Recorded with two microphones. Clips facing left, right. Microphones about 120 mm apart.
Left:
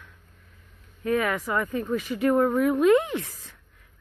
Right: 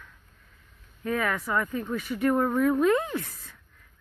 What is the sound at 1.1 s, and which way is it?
Speech, 15° left (ahead or behind).